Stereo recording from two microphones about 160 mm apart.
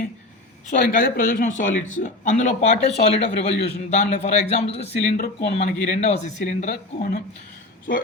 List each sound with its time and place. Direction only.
0.7 s speech: 55° left (ahead or behind)
5.0 s speech: 65° left (ahead or behind)
5.5 s speech: 50° left (ahead or behind)